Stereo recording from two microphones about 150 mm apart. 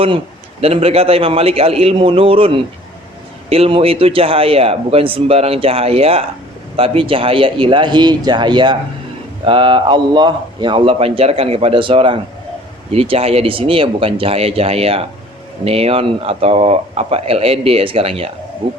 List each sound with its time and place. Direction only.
0.6 s a man's voice: 40° right (ahead or behind)